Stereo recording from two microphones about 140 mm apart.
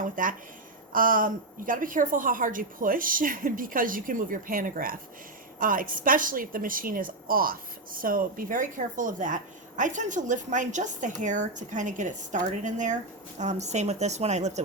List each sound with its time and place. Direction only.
0.2 s a woman's voice: 75° right (ahead or behind)
0.9 s a woman's voice: 85° right; by 14.6 s 55° right (ahead or behind)